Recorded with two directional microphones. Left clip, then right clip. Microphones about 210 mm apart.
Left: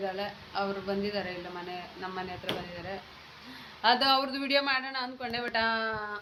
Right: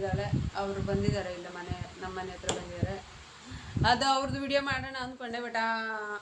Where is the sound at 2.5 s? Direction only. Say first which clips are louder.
Right 1 dB; 45° right (ahead or behind).